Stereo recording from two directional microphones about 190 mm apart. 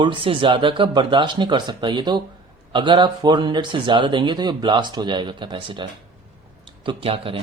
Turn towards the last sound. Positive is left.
turn(degrees=-30)  # may be behind; listen again after turning